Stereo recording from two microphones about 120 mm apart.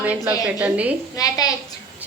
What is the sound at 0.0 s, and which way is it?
Speech, 15° right (ahead or behind).